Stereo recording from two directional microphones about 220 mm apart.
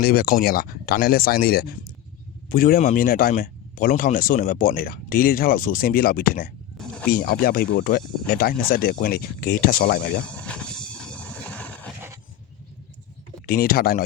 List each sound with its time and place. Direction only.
0.0 s speech: 45° left (ahead or behind)
6.7 s a sound: 5° left (ahead or behind)
7.1 s speech: 45° left (ahead or behind)
10.2 s vehicle: 5° left (ahead or behind)
13.5 s speech: 40° left (ahead or behind)